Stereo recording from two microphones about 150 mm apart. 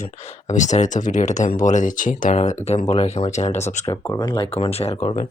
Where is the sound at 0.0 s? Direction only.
50° left (ahead or behind).